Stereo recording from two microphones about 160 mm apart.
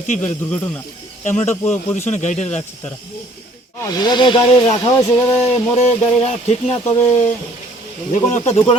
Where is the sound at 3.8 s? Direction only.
25° left (ahead or behind).